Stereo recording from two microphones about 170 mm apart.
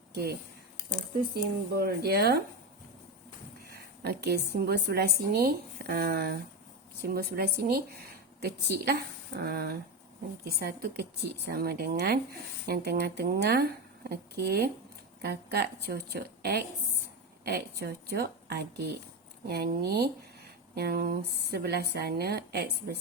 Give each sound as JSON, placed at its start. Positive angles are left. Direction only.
{"t": 0.1, "sound": "speech", "side_deg": -75}
{"t": 3.7, "sound": "a woman's voice", "side_deg": -70}
{"t": 8.4, "sound": "speech", "side_deg": -75}